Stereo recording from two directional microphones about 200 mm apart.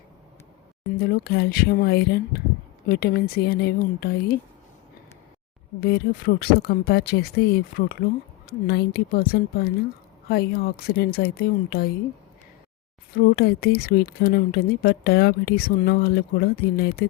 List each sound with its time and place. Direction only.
0.9 s speech: 50° left (ahead or behind)
5.8 s speech: 50° left (ahead or behind)
13.1 s speech: 50° left (ahead or behind)